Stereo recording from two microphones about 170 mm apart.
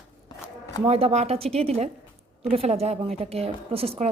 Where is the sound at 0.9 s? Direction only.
35° right (ahead or behind).